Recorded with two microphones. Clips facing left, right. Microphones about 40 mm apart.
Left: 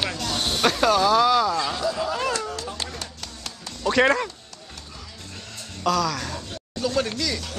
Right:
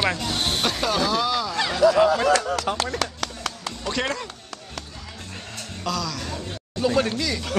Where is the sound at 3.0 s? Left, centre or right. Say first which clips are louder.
Right 9 dB; right.